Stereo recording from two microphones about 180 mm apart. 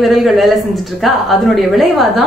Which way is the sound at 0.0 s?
Centre (ahead or behind).